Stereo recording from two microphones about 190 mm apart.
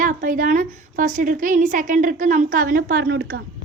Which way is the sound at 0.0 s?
45° right (ahead or behind).